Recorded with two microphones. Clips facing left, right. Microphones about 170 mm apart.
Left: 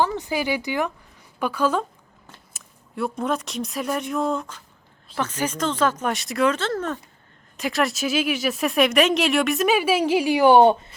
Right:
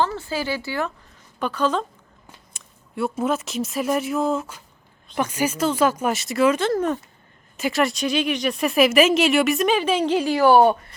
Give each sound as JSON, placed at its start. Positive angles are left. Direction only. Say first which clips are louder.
{"t": 0.0, "sound": "a woman's voice", "louder": "left 1 dB", "side_deg": 15}
{"t": 7.5, "sound": "speech", "louder": "right 2 dB", "side_deg": 0}